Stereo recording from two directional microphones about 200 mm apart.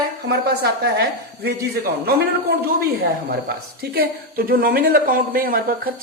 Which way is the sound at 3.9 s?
50° right (ahead or behind).